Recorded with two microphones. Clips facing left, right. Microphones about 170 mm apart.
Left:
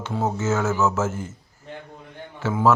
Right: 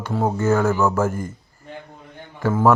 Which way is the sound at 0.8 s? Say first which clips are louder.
Right 3 dB; 15° right (ahead or behind).